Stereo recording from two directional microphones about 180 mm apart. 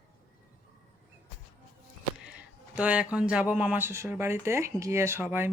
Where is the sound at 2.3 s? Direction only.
5° right (ahead or behind).